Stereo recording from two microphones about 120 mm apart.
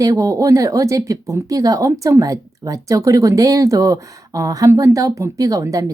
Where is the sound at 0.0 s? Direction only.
30° right (ahead or behind).